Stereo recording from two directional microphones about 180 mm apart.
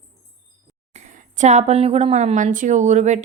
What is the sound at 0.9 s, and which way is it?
A woman's voice, 40° right (ahead or behind).